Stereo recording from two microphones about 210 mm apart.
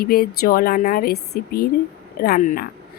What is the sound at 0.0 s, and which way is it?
Speech, 45° left (ahead or behind).